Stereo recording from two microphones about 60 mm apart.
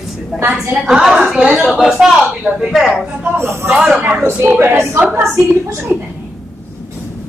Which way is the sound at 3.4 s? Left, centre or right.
Right.